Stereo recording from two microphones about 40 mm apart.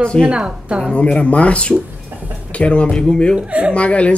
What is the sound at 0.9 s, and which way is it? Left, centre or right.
A man's voice, left.